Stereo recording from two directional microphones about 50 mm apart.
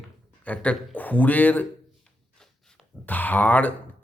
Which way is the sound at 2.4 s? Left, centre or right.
Centre.